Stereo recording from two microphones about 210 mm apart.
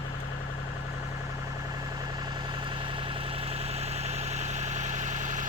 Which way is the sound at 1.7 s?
20° right (ahead or behind).